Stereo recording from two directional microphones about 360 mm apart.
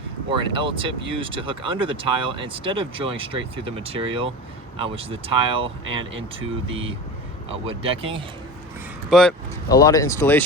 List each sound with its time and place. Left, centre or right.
0.3 s speech: centre
9.0 s speech: centre